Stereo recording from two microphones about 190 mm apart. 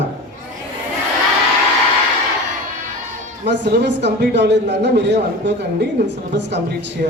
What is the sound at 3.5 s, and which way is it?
A man's voice, 65° right (ahead or behind).